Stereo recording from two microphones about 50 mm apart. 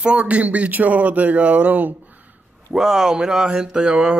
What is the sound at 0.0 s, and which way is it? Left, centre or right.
Speech, right.